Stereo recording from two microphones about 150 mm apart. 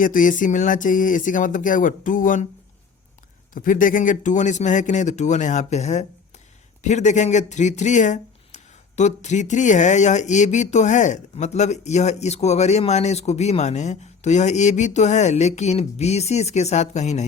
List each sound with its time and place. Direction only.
0.0 s speech: 65° left (ahead or behind)
3.5 s speech: 65° left (ahead or behind)